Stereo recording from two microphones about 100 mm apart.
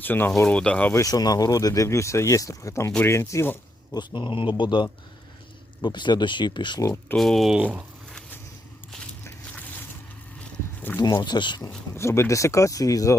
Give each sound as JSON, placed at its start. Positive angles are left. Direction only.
{"t": 0.0, "sound": "speech", "side_deg": 20}
{"t": 0.4, "sound": "speech", "side_deg": 10}
{"t": 0.9, "sound": "speech", "side_deg": 35}
{"t": 3.9, "sound": "speech", "side_deg": 50}
{"t": 7.2, "sound": "speech", "side_deg": 0}
{"t": 7.5, "sound": "speech", "side_deg": -15}
{"t": 11.0, "sound": "speech", "side_deg": 45}
{"t": 11.9, "sound": "speech", "side_deg": 30}